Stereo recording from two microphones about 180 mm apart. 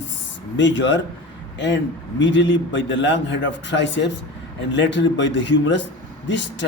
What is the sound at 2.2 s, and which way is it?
A man's voice, 85° left.